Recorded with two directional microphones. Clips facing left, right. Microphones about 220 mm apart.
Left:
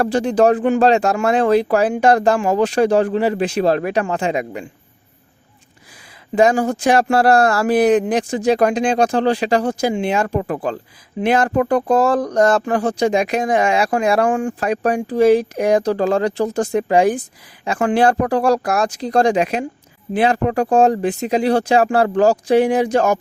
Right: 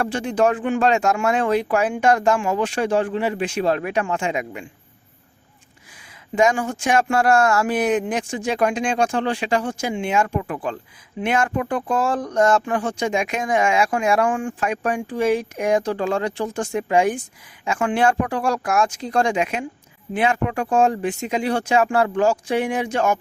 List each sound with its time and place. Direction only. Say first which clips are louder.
0.0 s speech: left 5 dB; 35° left (ahead or behind)
6.3 s speech: left 4 dB; 35° left (ahead or behind)